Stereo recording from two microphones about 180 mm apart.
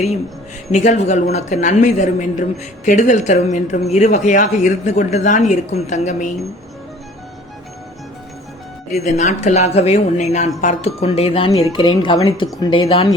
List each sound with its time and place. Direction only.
0.7 s speech: 40° left (ahead or behind)
9.1 s speech: 40° left (ahead or behind)